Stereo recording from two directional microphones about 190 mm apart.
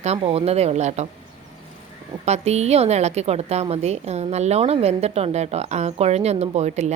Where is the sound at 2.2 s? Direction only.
35° right (ahead or behind).